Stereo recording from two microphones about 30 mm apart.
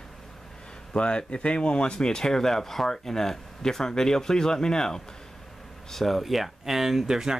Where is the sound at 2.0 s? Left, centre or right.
Left.